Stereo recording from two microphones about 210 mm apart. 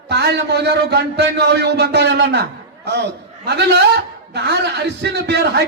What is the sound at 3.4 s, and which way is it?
Speech, 50° right (ahead or behind).